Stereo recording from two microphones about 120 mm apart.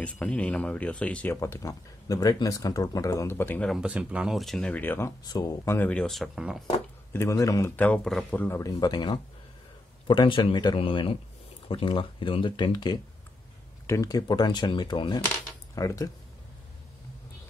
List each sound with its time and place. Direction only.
0.0 s speech: 10° left (ahead or behind)
1.3 s speech: 25° left (ahead or behind)
3.7 s speech: 10° right (ahead or behind); by 5.1 s 15° left (ahead or behind)
5.2 s speech: 35° left (ahead or behind)
5.8 s speech: 10° left (ahead or behind); by 6.6 s 5° right (ahead or behind)
7.1 s speech: 20° left (ahead or behind)
7.7 s speech: 10° left (ahead or behind)
8.7 s speech: 35° left (ahead or behind)
15.7 s speech: 30° left (ahead or behind)